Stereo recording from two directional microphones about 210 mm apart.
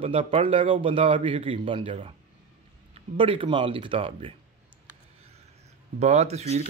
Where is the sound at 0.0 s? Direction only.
25° right (ahead or behind).